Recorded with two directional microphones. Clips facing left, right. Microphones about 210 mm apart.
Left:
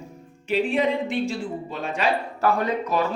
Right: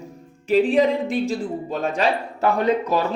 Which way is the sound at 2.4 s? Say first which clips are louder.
Right 4 dB; 25° right (ahead or behind).